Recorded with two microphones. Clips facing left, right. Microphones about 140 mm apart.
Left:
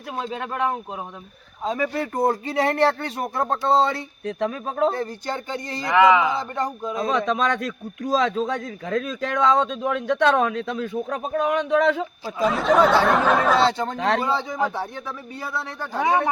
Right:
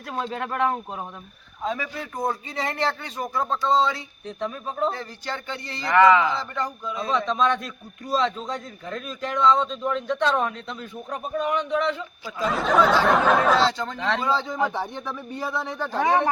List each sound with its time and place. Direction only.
0.2 s speech: 15° left (ahead or behind)
1.8 s speech: 60° left (ahead or behind); by 4.9 s 80° left
4.9 s speech: 45° left (ahead or behind)
6.0 s speech: 15° left (ahead or behind)
6.6 s speech: 45° left (ahead or behind)
7.6 s a man's voice: 90° left
12.4 s speech: centre (ahead or behind)
13.7 s speech: 50° left (ahead or behind)
14.3 s speech: 15° left (ahead or behind)